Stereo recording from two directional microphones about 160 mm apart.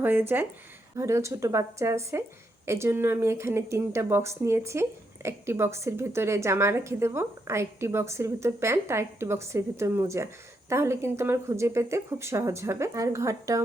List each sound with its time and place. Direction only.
0.0 s speech: 15° right (ahead or behind)